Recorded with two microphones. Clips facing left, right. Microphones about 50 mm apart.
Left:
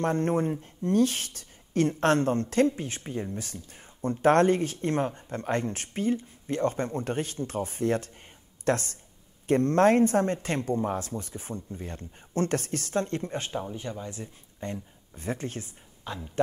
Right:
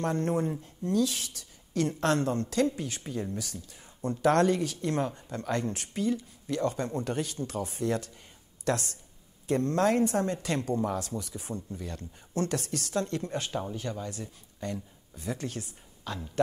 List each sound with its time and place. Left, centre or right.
0.0 s speech: left